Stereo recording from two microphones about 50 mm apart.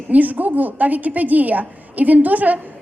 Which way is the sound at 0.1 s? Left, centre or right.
Right.